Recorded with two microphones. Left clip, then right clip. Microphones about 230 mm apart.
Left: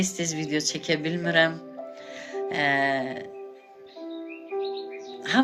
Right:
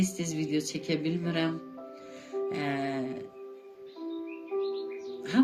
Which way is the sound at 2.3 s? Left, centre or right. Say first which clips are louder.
Left 7 dB; centre.